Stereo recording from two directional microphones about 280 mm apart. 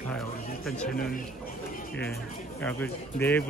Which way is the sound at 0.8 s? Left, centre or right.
Left.